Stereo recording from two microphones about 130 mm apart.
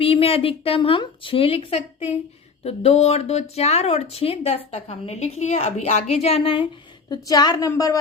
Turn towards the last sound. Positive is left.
turn(degrees=25)  # may be behind; listen again after turning